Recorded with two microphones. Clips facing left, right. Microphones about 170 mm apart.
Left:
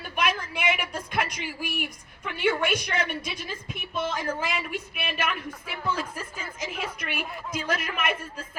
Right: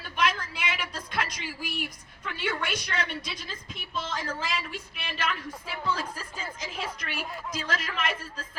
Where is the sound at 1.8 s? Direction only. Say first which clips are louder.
Left 2 dB; 25° left (ahead or behind).